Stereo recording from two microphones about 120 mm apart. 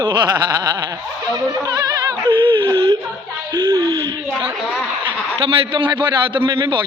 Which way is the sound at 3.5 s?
30° right (ahead or behind).